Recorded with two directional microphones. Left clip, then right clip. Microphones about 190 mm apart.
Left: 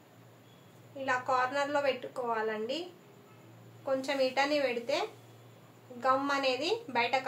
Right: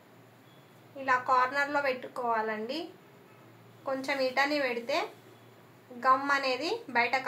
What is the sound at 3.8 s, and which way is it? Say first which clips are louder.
Speech: even; 25° left (ahead or behind).